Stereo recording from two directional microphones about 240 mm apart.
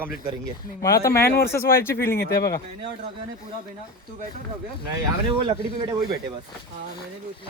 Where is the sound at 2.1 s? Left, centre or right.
Left.